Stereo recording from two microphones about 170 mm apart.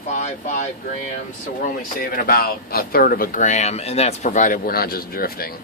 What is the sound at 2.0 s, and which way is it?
Speech, 60° left (ahead or behind).